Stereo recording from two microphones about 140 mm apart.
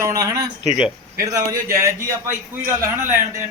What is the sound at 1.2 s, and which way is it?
A man's voice, 25° right (ahead or behind).